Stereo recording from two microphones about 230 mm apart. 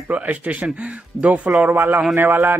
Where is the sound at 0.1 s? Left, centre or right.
Centre.